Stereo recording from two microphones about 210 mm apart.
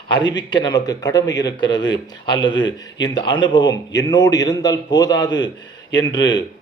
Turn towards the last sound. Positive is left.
turn(degrees=20)  # may be behind; listen again after turning